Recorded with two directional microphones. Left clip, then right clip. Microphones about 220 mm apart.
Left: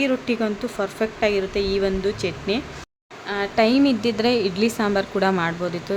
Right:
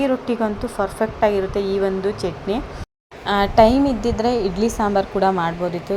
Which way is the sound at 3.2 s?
25° right (ahead or behind).